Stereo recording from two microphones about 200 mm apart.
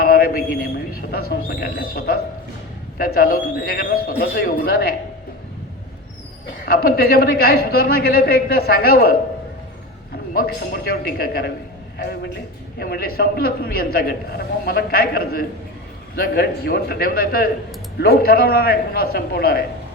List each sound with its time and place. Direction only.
0.0 s a man's voice: 50° left (ahead or behind)
6.7 s a man's voice: 50° left (ahead or behind)
10.3 s a man's voice: 50° left (ahead or behind)